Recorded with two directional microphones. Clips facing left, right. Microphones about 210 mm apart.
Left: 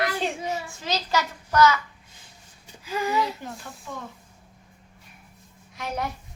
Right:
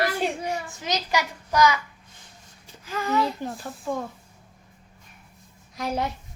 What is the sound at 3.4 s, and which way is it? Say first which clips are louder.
Speech: right 7 dB; 35° right (ahead or behind).